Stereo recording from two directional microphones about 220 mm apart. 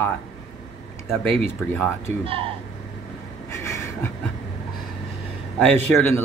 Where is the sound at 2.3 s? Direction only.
25° right (ahead or behind).